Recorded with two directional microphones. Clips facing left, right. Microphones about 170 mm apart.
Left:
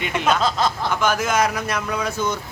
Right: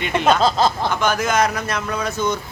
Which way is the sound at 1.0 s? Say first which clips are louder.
Even; 5° left (ahead or behind).